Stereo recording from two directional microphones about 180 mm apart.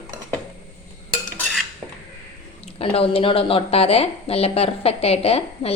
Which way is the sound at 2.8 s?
30° left (ahead or behind).